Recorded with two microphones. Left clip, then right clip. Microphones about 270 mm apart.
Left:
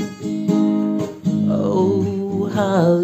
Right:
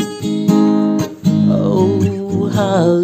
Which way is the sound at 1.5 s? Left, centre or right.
Centre.